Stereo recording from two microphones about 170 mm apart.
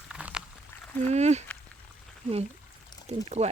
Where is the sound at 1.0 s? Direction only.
40° right (ahead or behind).